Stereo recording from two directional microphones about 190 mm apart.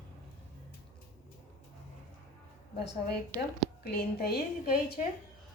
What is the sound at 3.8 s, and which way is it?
A woman's voice, 55° left (ahead or behind).